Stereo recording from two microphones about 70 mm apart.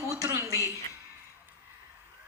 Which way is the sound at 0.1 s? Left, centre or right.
Right.